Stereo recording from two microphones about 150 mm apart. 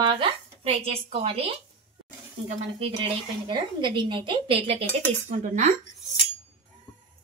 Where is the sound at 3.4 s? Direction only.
30° right (ahead or behind).